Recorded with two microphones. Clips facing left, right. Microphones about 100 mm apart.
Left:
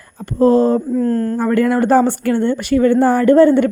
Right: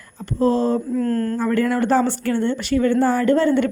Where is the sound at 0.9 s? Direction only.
25° left (ahead or behind).